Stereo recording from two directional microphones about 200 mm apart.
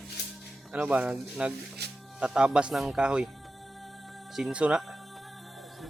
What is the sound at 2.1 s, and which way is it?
Speech, 5° right (ahead or behind).